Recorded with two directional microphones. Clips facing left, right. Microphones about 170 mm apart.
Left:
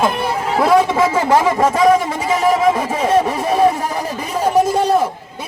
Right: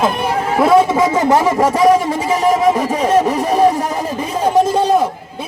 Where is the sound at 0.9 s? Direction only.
15° right (ahead or behind).